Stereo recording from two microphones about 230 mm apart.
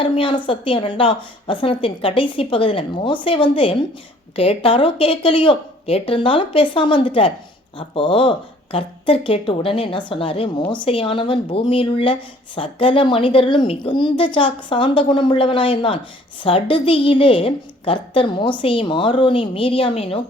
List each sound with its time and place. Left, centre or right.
0.0 s speech: left